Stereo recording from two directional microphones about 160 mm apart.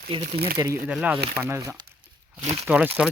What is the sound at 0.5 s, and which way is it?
Speech, 20° right (ahead or behind).